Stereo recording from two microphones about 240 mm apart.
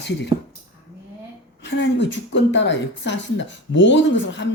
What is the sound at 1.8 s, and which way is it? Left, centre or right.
Speech, left.